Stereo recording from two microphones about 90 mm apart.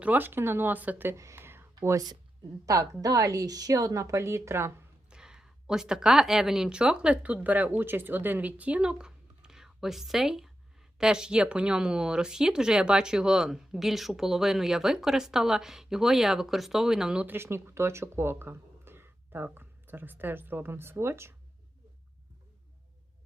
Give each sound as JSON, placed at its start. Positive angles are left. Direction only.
{"t": 0.0, "sound": "speech", "side_deg": -20}
{"t": 1.1, "sound": "a sound", "side_deg": -35}
{"t": 2.6, "sound": "a woman's voice", "side_deg": -40}
{"t": 5.0, "sound": "speech", "side_deg": -10}
{"t": 17.2, "sound": "speech", "side_deg": -25}